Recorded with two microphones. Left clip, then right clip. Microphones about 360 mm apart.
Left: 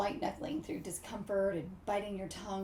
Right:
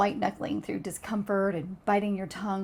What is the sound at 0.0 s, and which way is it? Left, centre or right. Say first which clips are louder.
Speech: right 9 dB; right.